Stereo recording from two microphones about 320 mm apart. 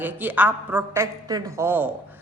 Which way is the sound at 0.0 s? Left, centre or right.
Centre.